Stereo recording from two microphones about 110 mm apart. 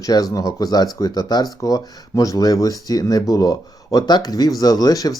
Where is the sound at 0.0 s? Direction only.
35° left (ahead or behind).